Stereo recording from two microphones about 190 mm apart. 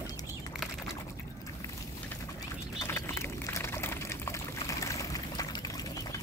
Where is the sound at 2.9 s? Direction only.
15° left (ahead or behind).